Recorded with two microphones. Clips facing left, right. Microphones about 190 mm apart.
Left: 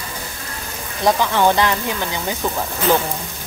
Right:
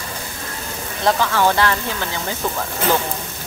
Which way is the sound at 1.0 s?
20° left (ahead or behind).